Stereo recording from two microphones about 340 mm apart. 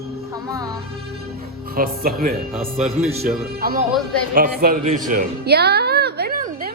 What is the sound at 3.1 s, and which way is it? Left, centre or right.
A man's voice, right.